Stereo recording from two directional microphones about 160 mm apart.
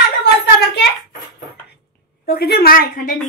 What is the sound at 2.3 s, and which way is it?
Speech, 85° left.